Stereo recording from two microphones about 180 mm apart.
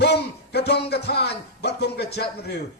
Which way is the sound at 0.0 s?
65° left (ahead or behind).